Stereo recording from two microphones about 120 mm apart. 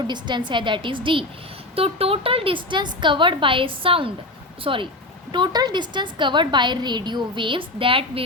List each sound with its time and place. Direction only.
0.1 s a woman's voice: 40° right (ahead or behind)